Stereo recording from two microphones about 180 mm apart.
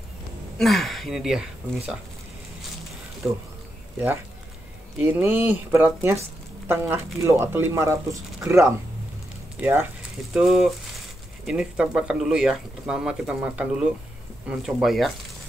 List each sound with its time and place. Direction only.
0.6 s speech: centre (ahead or behind)
3.2 s speech: 5° right (ahead or behind)
5.0 s speech: 15° right (ahead or behind)